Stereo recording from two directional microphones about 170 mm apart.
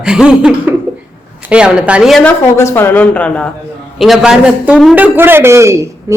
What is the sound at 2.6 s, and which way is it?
A man's voice, 15° left (ahead or behind).